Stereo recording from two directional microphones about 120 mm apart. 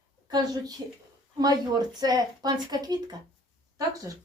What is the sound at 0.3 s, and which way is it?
Speech, 35° right (ahead or behind).